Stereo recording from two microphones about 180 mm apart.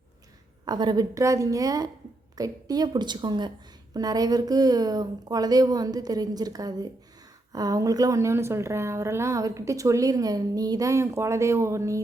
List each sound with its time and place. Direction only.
0.6 s a woman's voice: 25° right (ahead or behind)